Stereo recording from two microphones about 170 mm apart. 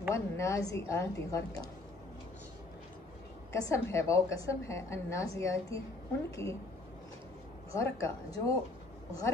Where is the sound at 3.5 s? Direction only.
15° left (ahead or behind).